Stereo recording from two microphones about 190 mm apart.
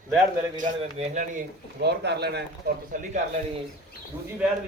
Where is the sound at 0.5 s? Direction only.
40° right (ahead or behind).